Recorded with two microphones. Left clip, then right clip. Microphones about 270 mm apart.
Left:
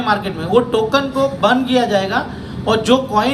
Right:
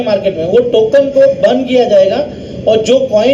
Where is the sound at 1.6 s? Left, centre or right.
Left.